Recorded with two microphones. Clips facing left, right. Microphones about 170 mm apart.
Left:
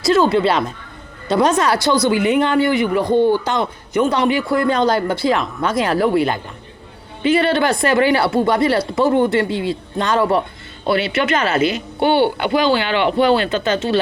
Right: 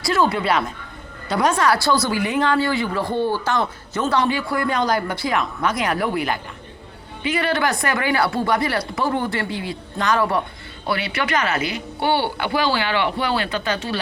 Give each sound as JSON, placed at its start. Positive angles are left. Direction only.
{"t": 0.0, "sound": "speech", "side_deg": 25}